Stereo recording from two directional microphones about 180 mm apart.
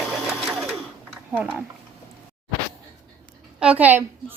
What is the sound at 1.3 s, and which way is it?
Speech, 5° right (ahead or behind).